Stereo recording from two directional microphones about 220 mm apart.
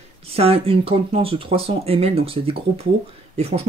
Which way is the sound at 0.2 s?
25° right (ahead or behind).